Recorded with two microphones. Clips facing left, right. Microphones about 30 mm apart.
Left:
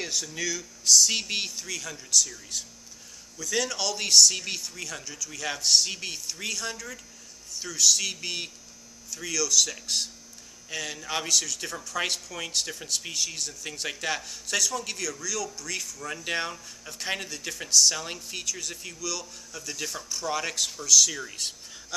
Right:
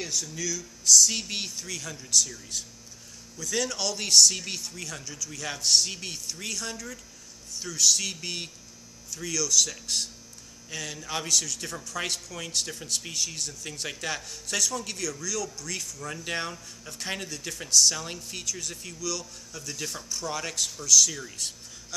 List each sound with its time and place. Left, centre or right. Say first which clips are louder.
0.0 s speech: left 1 dB; centre